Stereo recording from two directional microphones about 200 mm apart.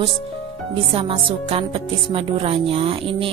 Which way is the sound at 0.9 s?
25° right (ahead or behind).